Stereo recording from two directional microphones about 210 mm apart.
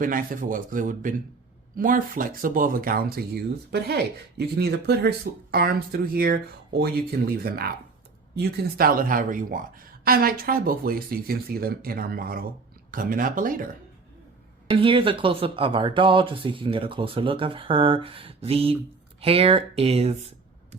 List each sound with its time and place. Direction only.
0.0 s speech: 40° right (ahead or behind)
14.7 s speech: 25° right (ahead or behind)